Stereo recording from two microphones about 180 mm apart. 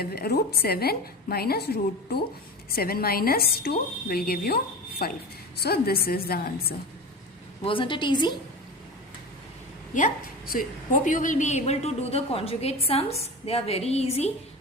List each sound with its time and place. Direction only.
0.0 s a woman's voice: 60° left (ahead or behind)
7.6 s a woman's voice: 30° left (ahead or behind)
9.9 s a woman's voice: 50° left (ahead or behind)